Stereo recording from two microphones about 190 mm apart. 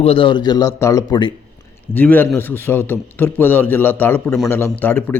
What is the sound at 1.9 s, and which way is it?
Speech, 10° left (ahead or behind).